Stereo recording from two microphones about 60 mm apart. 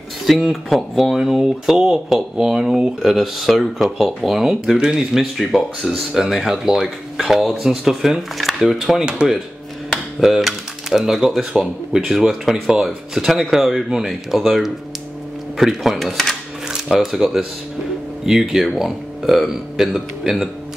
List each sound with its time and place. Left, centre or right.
0.3 s speech: centre
9.0 s speech: centre
10.2 s speech: centre